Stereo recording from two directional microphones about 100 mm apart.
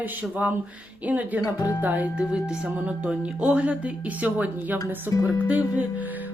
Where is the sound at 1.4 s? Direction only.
40° left (ahead or behind).